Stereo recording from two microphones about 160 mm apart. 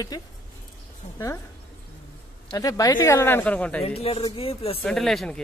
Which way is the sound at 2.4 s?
25° left (ahead or behind).